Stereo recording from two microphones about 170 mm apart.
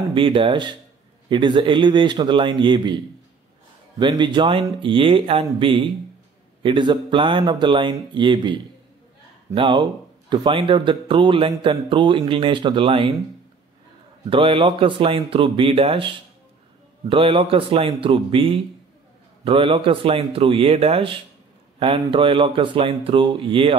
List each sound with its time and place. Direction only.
0.1 s speech: 30° right (ahead or behind)
4.0 s speech: 25° right (ahead or behind)
14.3 s speech: 30° right (ahead or behind)